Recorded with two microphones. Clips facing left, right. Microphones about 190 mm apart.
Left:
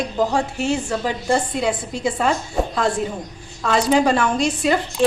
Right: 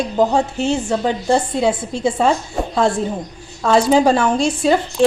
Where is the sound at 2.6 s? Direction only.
Centre (ahead or behind).